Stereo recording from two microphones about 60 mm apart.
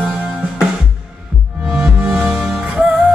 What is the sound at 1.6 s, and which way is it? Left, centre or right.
Music, centre.